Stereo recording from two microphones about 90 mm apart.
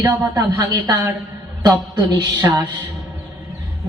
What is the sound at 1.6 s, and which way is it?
Music, 50° right (ahead or behind).